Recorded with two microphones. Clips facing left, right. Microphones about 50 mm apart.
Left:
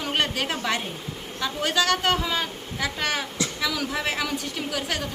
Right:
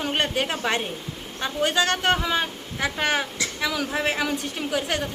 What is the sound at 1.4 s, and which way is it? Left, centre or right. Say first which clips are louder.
A woman's voice: right 2 dB; right.